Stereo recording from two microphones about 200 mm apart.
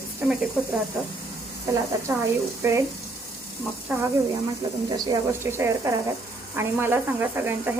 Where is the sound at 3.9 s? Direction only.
10° right (ahead or behind).